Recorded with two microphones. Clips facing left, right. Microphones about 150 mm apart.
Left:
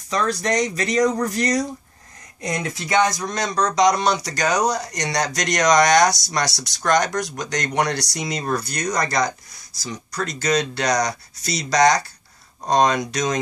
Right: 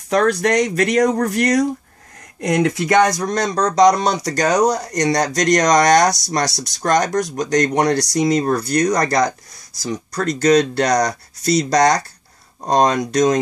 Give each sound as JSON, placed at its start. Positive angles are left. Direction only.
{"t": 0.1, "sound": "speech", "side_deg": -60}
{"t": 3.2, "sound": "speech", "side_deg": -45}
{"t": 4.4, "sound": "speech", "side_deg": -30}
{"t": 10.9, "sound": "speech", "side_deg": -55}
{"t": 11.7, "sound": "speech", "side_deg": -35}